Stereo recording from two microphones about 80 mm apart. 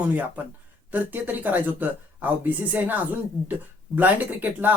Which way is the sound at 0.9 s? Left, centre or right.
Right.